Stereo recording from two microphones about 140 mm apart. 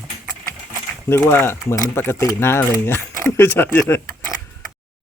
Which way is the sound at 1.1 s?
15° left (ahead or behind).